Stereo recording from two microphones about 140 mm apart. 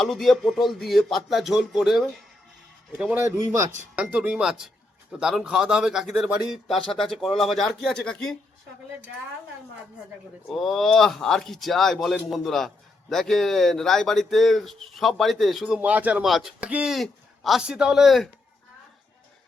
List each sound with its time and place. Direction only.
0.0 s a man's voice: centre (ahead or behind)
3.2 s speech: 25° right (ahead or behind)
3.9 s speech: 10° right (ahead or behind)
10.4 s speech: centre (ahead or behind)
15.8 s speech: 10° right (ahead or behind)